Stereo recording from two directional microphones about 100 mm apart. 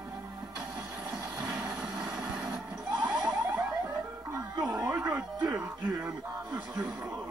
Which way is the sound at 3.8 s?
35° right (ahead or behind).